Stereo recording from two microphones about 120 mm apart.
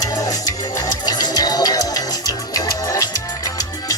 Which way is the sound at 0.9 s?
35° left (ahead or behind).